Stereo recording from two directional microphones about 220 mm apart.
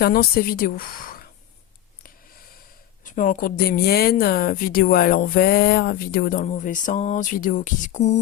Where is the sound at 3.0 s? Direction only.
35° left (ahead or behind).